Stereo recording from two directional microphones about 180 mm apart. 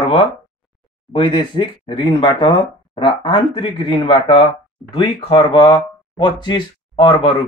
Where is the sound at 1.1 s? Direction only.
25° left (ahead or behind).